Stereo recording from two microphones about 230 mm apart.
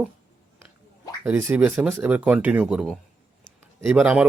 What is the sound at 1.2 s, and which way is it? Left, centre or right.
Speech, centre.